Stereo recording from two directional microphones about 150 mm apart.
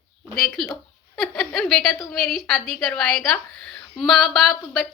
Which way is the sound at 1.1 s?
Centre (ahead or behind).